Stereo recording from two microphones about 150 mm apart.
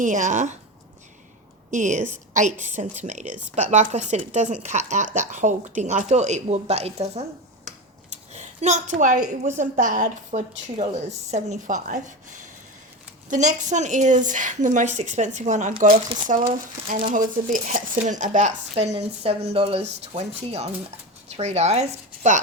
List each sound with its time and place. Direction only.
0.0 s a woman's voice: 55° right (ahead or behind)
1.7 s a woman's voice: 55° right (ahead or behind)
15.9 s speech: 35° right (ahead or behind)
16.2 s a woman's voice: 60° right (ahead or behind)